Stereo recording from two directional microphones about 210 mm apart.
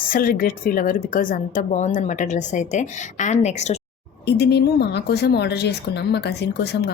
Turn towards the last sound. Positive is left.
turn(degrees=50)  # may be behind; listen again after turning